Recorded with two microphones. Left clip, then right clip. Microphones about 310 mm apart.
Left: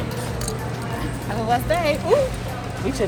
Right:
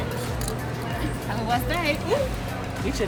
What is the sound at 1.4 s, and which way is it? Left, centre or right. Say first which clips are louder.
Speech: left 5 dB; centre.